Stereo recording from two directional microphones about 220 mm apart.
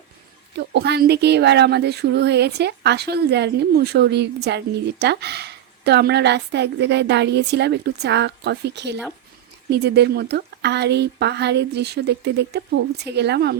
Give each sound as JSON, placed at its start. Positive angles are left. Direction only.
{"t": 0.7, "sound": "speech", "side_deg": -50}